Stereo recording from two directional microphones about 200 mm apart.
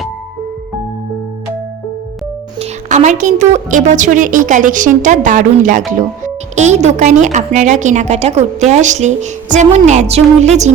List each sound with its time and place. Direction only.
2.6 s speech: 35° right (ahead or behind)